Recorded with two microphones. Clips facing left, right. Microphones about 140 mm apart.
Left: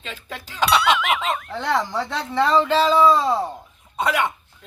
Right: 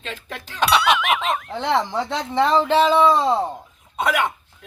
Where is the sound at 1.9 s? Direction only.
15° right (ahead or behind).